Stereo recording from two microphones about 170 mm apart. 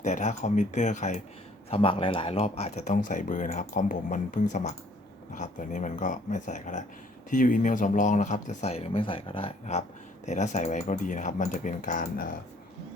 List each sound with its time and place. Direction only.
0.0 s speech: 45° left (ahead or behind)
1.7 s speech: 35° left (ahead or behind); by 12.3 s 55° left (ahead or behind)